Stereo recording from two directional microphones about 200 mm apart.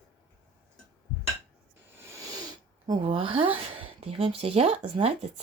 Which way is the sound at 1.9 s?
15° right (ahead or behind).